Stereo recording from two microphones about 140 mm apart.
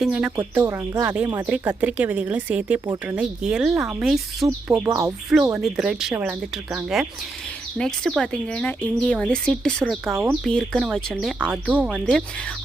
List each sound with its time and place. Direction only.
0.0 s speech: 10° right (ahead or behind)
1.4 s speech: 10° right (ahead or behind)
4.4 s speech: 25° right (ahead or behind)
5.5 s a woman's voice: centre (ahead or behind)
10.1 s speech: 15° right (ahead or behind)
10.4 s speech: 5° left (ahead or behind)
11.7 s speech: 5° right (ahead or behind)